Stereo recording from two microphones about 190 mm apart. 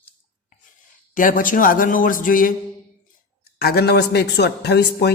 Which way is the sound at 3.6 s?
55° left (ahead or behind).